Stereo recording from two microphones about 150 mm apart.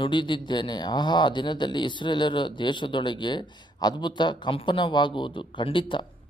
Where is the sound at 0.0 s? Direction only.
30° left (ahead or behind).